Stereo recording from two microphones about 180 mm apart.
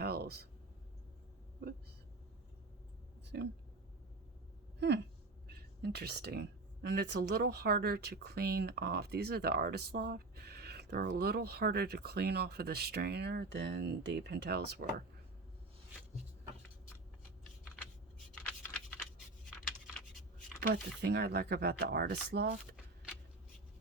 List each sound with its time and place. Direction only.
0.0 s a sound: 60° right (ahead or behind)
3.3 s speech: 70° right (ahead or behind)
4.8 s speech: 70° right (ahead or behind)
20.6 s speech: 65° right (ahead or behind)